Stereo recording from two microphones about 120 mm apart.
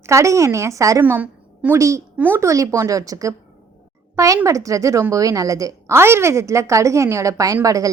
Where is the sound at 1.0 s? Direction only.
15° right (ahead or behind).